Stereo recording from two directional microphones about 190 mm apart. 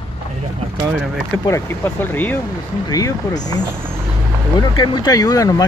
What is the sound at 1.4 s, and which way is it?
Speech, 15° left (ahead or behind).